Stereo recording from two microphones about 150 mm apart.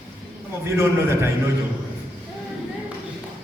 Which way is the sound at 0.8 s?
15° right (ahead or behind).